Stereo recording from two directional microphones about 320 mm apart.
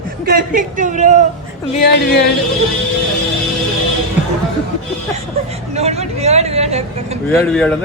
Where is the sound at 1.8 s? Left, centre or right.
Left.